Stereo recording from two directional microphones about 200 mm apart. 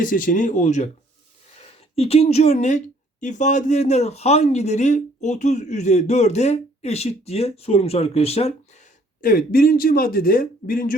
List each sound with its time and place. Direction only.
0.0 s speech: 40° left (ahead or behind)
2.0 s speech: 30° left (ahead or behind)